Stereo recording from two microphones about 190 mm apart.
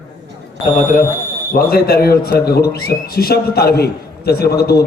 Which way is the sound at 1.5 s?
50° left (ahead or behind).